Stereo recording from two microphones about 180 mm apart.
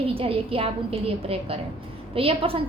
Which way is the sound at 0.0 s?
30° right (ahead or behind).